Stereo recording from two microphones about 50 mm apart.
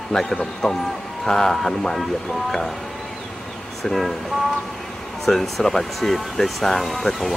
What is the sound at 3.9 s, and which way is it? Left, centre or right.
Speech, centre.